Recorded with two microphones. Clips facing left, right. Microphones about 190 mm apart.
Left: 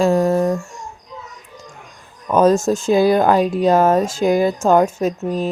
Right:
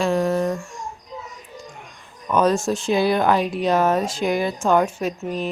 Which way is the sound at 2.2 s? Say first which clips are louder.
Left 5 dB; 40° left (ahead or behind).